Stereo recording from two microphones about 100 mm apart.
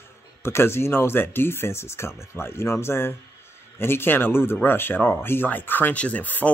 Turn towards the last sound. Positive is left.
turn(degrees=15)  # may be behind; listen again after turning